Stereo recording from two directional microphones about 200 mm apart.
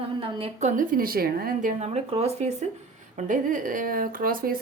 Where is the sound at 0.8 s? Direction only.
45° right (ahead or behind).